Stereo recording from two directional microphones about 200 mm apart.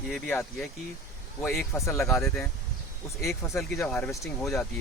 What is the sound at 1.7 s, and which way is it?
Speech, 15° left (ahead or behind).